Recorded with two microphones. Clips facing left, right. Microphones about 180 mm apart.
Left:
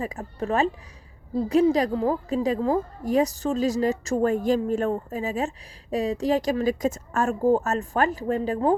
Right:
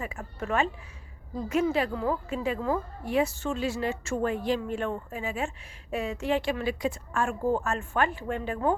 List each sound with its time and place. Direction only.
0.0 s a woman's voice: 35° left (ahead or behind)